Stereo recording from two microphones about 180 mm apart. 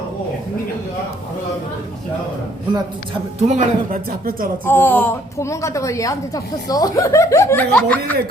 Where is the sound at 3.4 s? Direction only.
45° right (ahead or behind).